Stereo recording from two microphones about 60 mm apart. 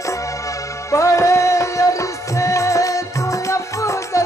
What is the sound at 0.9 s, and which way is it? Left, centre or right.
Music, left.